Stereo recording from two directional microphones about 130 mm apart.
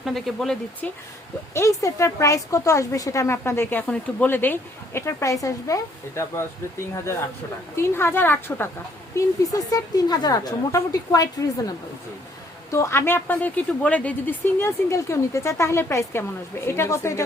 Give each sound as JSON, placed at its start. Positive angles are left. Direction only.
{"t": 0.0, "sound": "speech", "side_deg": 0}
{"t": 1.5, "sound": "a woman's voice", "side_deg": 25}
{"t": 9.1, "sound": "a woman's voice", "side_deg": 30}
{"t": 12.7, "sound": "a woman's voice", "side_deg": 20}